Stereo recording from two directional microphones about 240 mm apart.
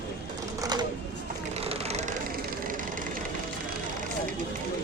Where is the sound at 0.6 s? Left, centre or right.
Centre.